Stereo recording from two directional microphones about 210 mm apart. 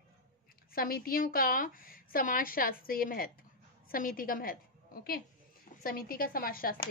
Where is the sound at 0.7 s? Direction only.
45° left (ahead or behind).